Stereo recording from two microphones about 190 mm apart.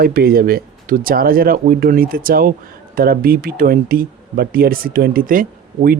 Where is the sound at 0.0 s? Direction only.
50° right (ahead or behind).